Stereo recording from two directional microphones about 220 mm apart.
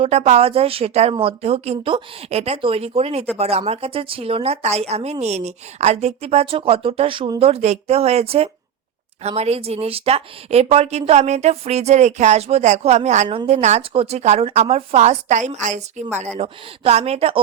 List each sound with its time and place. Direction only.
0.0 s speech: 30° right (ahead or behind)